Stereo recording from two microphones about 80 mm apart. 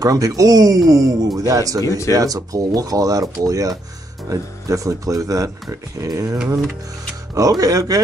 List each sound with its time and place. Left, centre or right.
0.0 s speech: right
1.9 s speech: left
2.1 s speech: right
7.3 s speech: right